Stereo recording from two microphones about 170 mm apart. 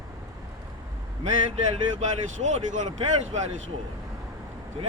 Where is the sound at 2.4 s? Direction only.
45° right (ahead or behind).